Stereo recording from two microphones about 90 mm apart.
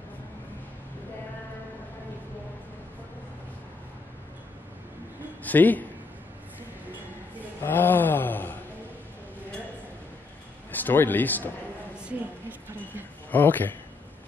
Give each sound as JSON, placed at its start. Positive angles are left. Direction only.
{"t": 5.4, "sound": "a man's voice", "side_deg": 20}
{"t": 7.6, "sound": "a sound", "side_deg": 20}
{"t": 10.7, "sound": "a man's voice", "side_deg": 20}
{"t": 12.0, "sound": "a woman's voice", "side_deg": -15}
{"t": 13.3, "sound": "speech", "side_deg": 20}